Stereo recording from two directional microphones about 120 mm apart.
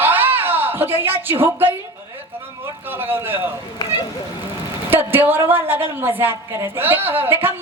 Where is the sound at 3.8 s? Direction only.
35° left (ahead or behind).